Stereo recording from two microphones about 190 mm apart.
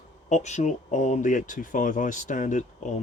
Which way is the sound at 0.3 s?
40° left (ahead or behind).